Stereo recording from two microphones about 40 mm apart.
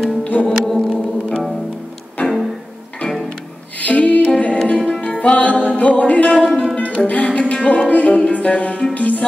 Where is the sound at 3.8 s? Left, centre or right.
Left.